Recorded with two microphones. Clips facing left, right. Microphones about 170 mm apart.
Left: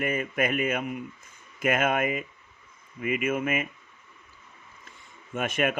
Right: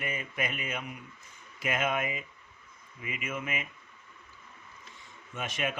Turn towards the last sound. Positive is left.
turn(degrees=55)  # may be behind; listen again after turning